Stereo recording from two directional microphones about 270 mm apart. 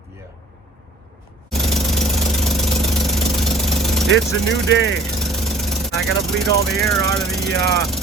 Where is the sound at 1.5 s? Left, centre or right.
Centre.